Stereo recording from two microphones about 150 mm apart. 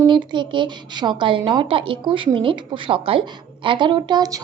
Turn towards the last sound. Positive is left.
turn(degrees=-25)  # may be behind; listen again after turning